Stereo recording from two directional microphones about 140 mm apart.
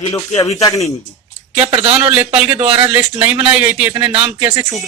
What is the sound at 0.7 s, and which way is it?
Speech, 25° left (ahead or behind).